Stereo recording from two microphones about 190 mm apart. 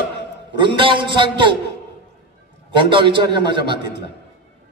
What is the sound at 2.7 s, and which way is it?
A man's voice, 25° right (ahead or behind).